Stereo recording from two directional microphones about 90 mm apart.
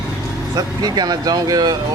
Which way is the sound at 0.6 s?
45° right (ahead or behind).